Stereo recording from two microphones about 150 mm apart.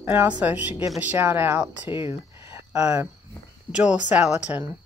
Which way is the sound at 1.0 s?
10° right (ahead or behind).